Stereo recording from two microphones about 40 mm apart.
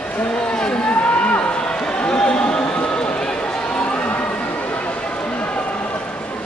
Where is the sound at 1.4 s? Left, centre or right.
Left.